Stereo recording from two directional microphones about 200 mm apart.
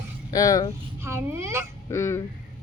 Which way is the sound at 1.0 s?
10° right (ahead or behind).